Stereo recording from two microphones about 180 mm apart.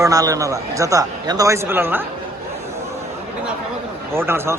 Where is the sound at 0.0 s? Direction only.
20° right (ahead or behind).